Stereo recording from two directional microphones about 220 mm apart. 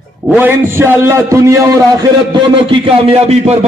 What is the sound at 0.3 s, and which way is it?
A man's voice, 10° right (ahead or behind).